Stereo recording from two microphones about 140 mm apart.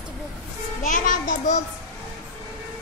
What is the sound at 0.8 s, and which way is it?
Speech, 65° left (ahead or behind).